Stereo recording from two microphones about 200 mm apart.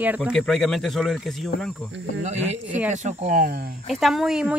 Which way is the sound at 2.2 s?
35° right (ahead or behind).